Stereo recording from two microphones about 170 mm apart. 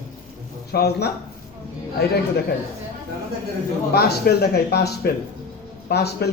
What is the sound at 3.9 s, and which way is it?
A man's voice, 70° left (ahead or behind).